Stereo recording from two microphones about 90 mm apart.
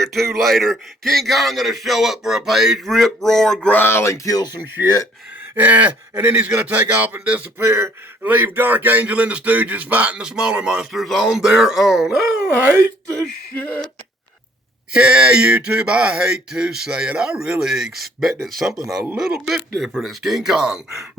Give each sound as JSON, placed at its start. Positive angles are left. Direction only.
{"t": 0.0, "sound": "a man's voice", "side_deg": 0}
{"t": 3.7, "sound": "speech", "side_deg": 25}
{"t": 5.5, "sound": "speech", "side_deg": -15}
{"t": 6.1, "sound": "speech", "side_deg": -30}
{"t": 6.4, "sound": "speech", "side_deg": -20}
{"t": 7.7, "sound": "speech", "side_deg": -30}
{"t": 14.9, "sound": "a man's voice", "side_deg": -10}